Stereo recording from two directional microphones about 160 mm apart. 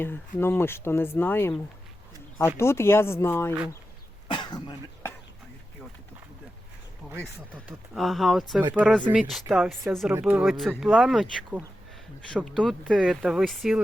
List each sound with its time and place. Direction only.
0.3 s speech: 15° left (ahead or behind)
2.6 s speech: 15° left (ahead or behind)
4.3 s cough: 25° left (ahead or behind)
7.7 s speech: centre (ahead or behind)
10.1 s speech: 10° right (ahead or behind)
10.4 s speech: centre (ahead or behind)